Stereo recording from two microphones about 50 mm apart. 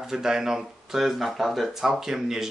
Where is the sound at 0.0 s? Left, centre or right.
Centre.